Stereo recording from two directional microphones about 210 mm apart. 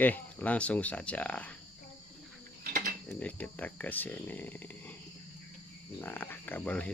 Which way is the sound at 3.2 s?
5° left (ahead or behind).